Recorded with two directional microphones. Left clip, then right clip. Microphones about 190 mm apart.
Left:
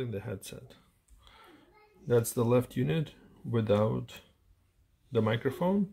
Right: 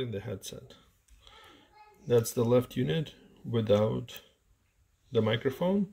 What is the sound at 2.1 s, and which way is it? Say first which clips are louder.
Speech: right 1 dB; 5° right (ahead or behind).